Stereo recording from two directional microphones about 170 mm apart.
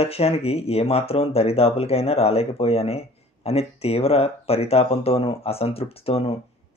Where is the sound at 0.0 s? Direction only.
35° left (ahead or behind).